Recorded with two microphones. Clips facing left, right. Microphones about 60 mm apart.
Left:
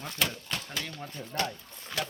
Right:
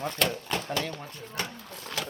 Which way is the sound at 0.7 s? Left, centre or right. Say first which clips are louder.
Right 6 dB; centre.